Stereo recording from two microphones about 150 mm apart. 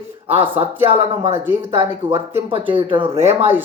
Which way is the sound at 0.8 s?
40° right (ahead or behind).